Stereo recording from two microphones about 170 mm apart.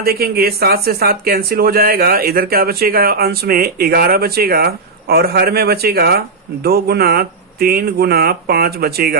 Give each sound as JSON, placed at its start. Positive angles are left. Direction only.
{"t": 0.0, "sound": "speech", "side_deg": -60}